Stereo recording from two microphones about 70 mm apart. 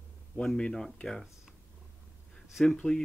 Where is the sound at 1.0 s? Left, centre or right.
Centre.